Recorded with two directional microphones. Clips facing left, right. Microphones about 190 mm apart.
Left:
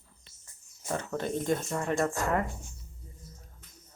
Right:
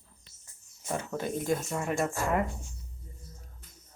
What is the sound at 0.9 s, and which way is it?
Speech, 10° right (ahead or behind).